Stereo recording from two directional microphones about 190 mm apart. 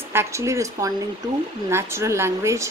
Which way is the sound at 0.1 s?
15° right (ahead or behind).